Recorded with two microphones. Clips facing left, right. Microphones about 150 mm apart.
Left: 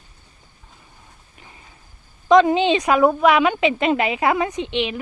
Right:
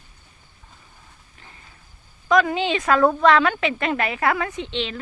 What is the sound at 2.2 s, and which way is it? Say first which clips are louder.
A woman's voice: left 5 dB; 25° left (ahead or behind).